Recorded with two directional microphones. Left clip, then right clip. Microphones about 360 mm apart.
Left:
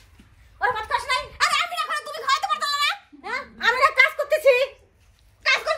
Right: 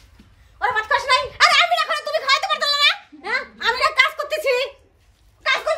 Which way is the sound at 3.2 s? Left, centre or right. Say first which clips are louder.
Right 4 dB; centre.